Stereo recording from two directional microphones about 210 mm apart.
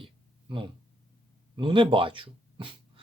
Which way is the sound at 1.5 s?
25° right (ahead or behind).